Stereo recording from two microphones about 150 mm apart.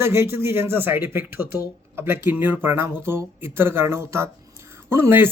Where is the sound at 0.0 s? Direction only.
15° right (ahead or behind).